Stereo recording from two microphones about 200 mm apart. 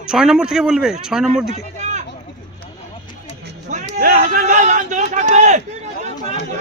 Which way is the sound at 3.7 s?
45° right (ahead or behind).